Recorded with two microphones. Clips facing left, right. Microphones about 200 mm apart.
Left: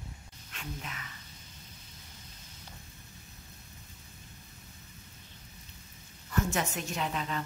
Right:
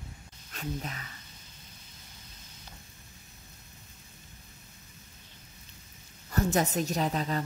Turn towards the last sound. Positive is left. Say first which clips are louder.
# right 4 dB
turn(degrees=-40)  # may be behind; listen again after turning